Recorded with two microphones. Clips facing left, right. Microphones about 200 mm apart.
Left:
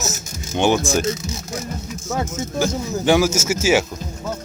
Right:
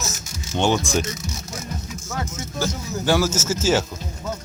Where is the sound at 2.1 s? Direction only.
20° left (ahead or behind).